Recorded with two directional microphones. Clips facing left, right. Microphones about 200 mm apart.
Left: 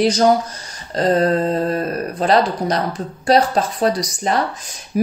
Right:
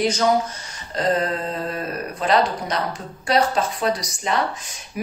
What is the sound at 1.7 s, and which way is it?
Speech, 40° left (ahead or behind).